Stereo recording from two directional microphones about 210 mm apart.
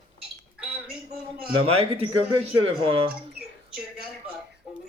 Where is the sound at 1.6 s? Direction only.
30° right (ahead or behind).